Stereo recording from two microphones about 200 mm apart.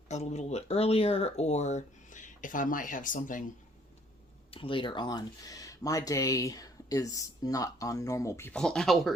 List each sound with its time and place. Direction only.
0.1 s speech: 35° left (ahead or behind)
4.5 s speech: 25° left (ahead or behind); by 9.1 s centre (ahead or behind)